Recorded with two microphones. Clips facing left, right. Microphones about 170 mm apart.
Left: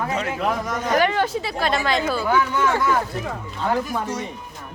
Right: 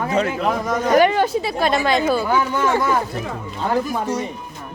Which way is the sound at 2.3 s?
35° right (ahead or behind).